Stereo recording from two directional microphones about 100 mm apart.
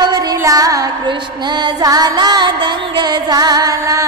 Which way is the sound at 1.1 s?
50° right (ahead or behind).